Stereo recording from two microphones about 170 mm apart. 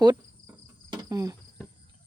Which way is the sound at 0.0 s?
25° right (ahead or behind).